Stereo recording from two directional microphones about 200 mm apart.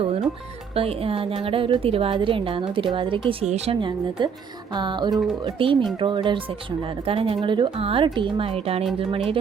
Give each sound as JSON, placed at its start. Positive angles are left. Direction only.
{"t": 0.0, "sound": "music", "side_deg": -30}
{"t": 0.7, "sound": "a woman's voice", "side_deg": -30}
{"t": 5.1, "sound": "speech", "side_deg": 0}
{"t": 5.4, "sound": "a woman's voice", "side_deg": -25}